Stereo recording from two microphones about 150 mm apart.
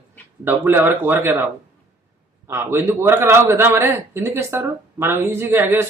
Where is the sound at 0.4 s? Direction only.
15° right (ahead or behind).